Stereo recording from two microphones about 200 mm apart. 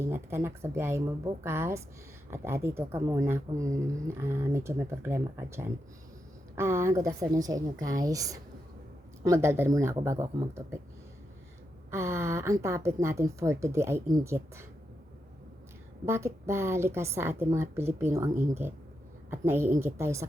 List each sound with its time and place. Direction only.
0.0 s a woman's voice: 15° right (ahead or behind)
11.9 s a woman's voice: 15° right (ahead or behind)
16.0 s a woman's voice: 15° right (ahead or behind)